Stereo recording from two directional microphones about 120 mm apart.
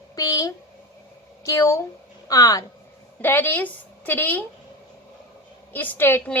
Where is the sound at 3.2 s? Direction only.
15° left (ahead or behind).